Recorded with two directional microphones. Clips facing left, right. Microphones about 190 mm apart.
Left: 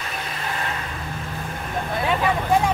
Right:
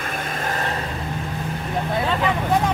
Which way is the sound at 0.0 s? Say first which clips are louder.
Right 4 dB; 50° right (ahead or behind).